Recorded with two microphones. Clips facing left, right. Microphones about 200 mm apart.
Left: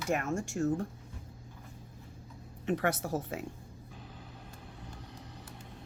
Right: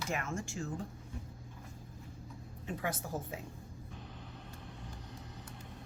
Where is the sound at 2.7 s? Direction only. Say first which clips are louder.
Left 8 dB; 75° left (ahead or behind).